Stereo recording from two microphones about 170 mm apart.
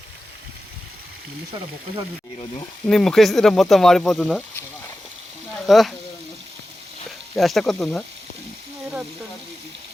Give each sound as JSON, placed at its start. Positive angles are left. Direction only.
{"t": 2.8, "sound": "speech", "side_deg": 5}
{"t": 5.5, "sound": "speech", "side_deg": 0}
{"t": 7.3, "sound": "speech", "side_deg": 0}